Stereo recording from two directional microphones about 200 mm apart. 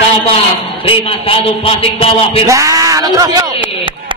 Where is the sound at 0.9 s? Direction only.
25° left (ahead or behind).